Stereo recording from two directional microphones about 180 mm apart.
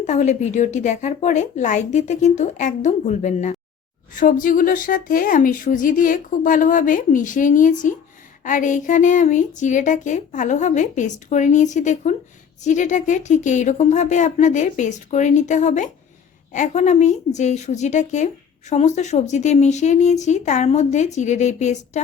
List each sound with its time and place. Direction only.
0.0 s a woman's voice: 40° left (ahead or behind)